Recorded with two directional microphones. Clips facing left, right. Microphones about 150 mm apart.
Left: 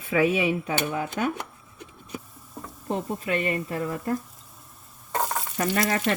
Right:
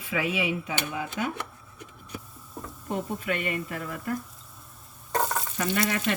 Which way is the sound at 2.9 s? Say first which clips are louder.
Left 3 dB; 35° left (ahead or behind).